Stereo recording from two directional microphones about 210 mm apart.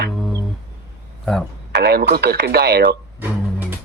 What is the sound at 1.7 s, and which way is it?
Speech, 50° right (ahead or behind).